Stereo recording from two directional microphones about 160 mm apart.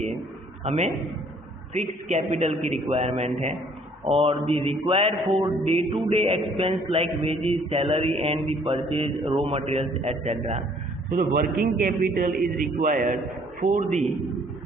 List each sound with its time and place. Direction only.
0.6 s a man's voice: 45° right (ahead or behind)
4.2 s music: 35° right (ahead or behind)
11.1 s a man's voice: 70° right (ahead or behind); by 14.0 s 50° right (ahead or behind)